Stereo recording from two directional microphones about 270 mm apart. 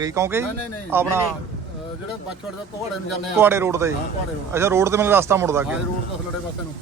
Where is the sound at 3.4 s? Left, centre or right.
Centre.